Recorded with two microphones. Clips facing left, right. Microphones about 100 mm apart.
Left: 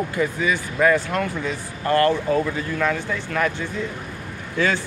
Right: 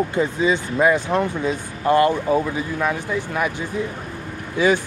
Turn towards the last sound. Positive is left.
turn(degrees=-15)  # may be behind; listen again after turning